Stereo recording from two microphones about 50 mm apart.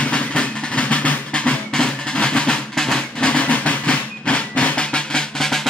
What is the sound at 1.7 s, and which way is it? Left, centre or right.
Percussion, centre.